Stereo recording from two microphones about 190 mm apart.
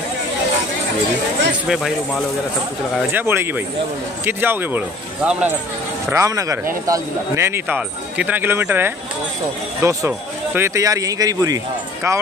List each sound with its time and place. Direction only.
1.7 s speech: centre (ahead or behind)
3.1 s speech: 10° right (ahead or behind)